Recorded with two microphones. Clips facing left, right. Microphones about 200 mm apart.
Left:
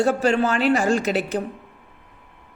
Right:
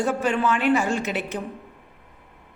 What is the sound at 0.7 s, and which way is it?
Speech, 90° left.